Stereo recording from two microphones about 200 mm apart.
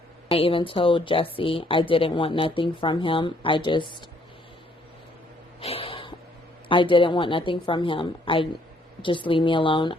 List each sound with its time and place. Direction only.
0.3 s a woman's voice: 25° left (ahead or behind)
5.5 s a sound: 30° left (ahead or behind)
6.7 s a woman's voice: 25° left (ahead or behind)